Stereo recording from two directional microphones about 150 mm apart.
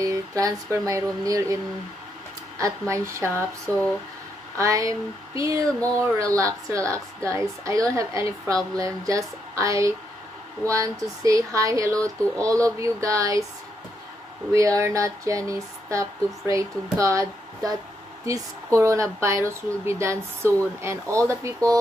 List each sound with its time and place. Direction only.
0.0 s a woman's voice: 20° right (ahead or behind)
2.9 s a woman's voice: 20° right (ahead or behind)
14.5 s a woman's voice: 20° right (ahead or behind)